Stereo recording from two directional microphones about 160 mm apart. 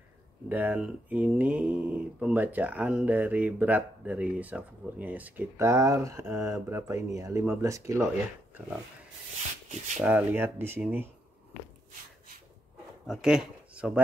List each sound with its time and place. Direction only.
0.5 s mantra: 10° right (ahead or behind)
9.9 s mantra: 10° right (ahead or behind)
13.0 s speech: 5° right (ahead or behind)